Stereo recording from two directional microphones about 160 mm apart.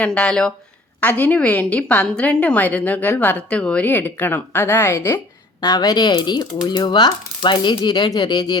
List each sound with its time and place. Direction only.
0.0 s a woman's voice: 5° left (ahead or behind); by 8.5 s 25° left (ahead or behind)